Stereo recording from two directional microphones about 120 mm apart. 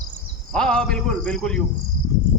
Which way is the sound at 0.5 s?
5° left (ahead or behind).